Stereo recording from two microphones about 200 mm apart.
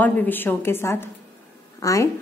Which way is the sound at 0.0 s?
10° left (ahead or behind).